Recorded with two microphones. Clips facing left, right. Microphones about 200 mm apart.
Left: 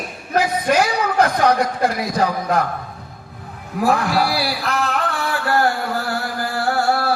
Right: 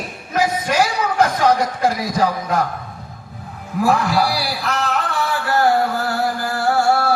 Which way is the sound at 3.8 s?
60° left (ahead or behind).